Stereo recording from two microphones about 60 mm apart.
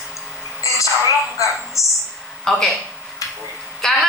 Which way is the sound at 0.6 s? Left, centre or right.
Left.